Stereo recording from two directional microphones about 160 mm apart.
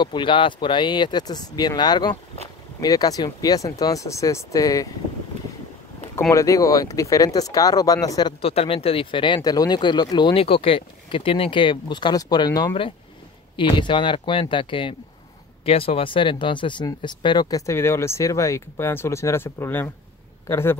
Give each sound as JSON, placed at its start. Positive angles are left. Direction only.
{"t": 0.0, "sound": "speech", "side_deg": 30}
{"t": 6.3, "sound": "speech", "side_deg": 20}